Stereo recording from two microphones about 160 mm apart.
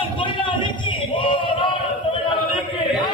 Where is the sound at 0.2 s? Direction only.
30° left (ahead or behind).